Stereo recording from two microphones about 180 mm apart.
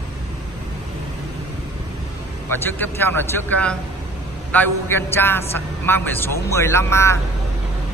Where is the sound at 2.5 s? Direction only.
10° left (ahead or behind).